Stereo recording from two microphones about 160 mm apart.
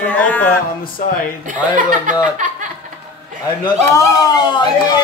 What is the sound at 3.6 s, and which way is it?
A man's voice, 20° left (ahead or behind).